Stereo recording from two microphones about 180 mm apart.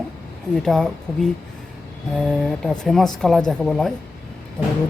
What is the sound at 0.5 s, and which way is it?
Speech, centre (ahead or behind).